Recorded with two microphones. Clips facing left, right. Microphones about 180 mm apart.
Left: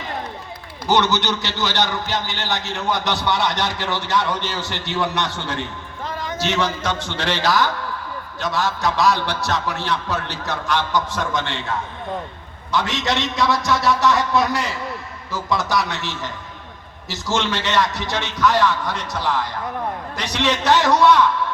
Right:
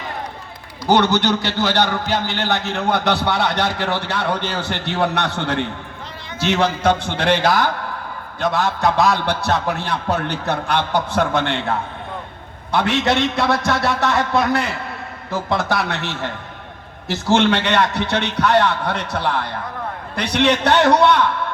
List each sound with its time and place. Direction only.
0.9 s a man's voice: 55° right (ahead or behind)
6.1 s a sound: 45° left (ahead or behind)
6.4 s a man's voice: 60° right (ahead or behind)